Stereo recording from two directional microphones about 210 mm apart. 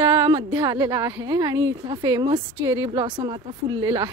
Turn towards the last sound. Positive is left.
turn(degrees=-20)  # may be behind; listen again after turning